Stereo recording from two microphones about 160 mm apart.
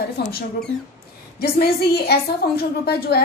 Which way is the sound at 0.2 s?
85° left.